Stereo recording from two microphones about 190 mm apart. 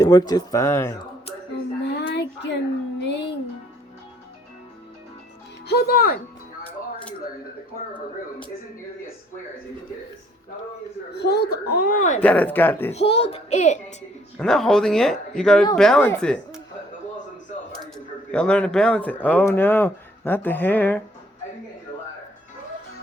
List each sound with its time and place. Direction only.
0.0 s speech: 20° left (ahead or behind)
1.8 s a sound: 65° left (ahead or behind)
3.0 s music: 65° left (ahead or behind)
5.6 s speech: 55° left (ahead or behind)
11.2 s speech: 60° left (ahead or behind); by 12.2 s 40° left (ahead or behind)
12.2 s speech: 10° left (ahead or behind)
12.9 s a child's voice: 30° left (ahead or behind)
14.3 s speech: 5° left (ahead or behind)
17.9 s speech: 5° left (ahead or behind)